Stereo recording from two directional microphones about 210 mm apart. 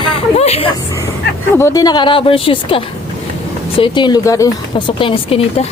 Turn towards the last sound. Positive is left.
turn(degrees=25)  # may be behind; listen again after turning